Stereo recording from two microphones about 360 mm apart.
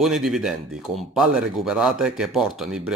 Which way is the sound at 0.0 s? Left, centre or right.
Centre.